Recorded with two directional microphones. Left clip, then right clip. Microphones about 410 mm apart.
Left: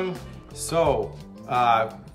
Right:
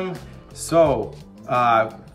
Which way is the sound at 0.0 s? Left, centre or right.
Centre.